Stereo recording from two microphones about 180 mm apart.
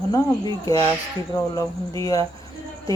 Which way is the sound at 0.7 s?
20° left (ahead or behind).